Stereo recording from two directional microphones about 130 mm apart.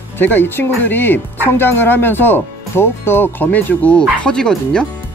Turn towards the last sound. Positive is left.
turn(degrees=5)  # may be behind; listen again after turning